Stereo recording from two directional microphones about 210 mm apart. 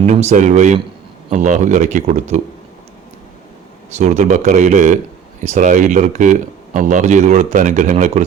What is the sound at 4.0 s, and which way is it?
A man's voice, 35° right (ahead or behind).